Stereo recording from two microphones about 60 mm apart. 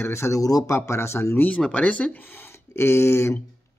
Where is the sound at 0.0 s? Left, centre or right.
Left.